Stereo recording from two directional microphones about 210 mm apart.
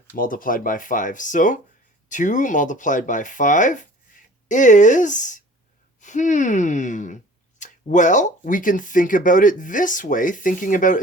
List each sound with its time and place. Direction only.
0.2 s speech: 40° left (ahead or behind)